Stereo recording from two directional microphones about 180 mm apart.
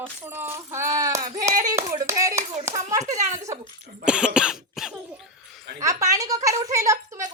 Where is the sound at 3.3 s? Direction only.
15° right (ahead or behind).